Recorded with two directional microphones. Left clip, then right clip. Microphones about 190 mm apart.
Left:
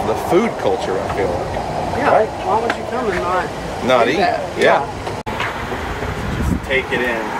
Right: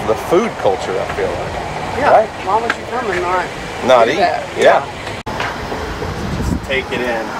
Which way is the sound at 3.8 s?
Centre (ahead or behind).